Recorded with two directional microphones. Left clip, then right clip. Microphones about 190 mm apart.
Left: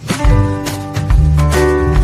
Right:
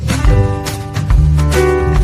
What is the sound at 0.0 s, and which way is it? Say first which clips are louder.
Music: even; centre (ahead or behind).